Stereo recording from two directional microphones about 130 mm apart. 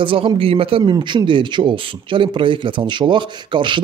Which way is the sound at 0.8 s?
35° right (ahead or behind).